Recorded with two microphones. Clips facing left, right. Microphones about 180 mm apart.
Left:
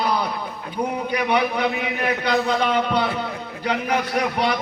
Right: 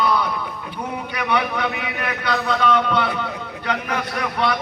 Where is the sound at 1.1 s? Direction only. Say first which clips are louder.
Left 1 dB; 35° left (ahead or behind).